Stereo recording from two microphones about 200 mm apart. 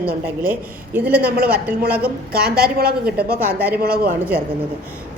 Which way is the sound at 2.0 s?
50° right (ahead or behind).